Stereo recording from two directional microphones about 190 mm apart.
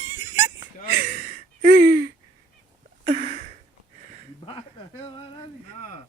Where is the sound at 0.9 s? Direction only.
50° right (ahead or behind).